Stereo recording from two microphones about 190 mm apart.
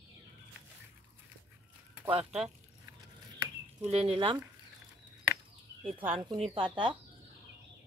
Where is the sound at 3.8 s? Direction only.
30° right (ahead or behind).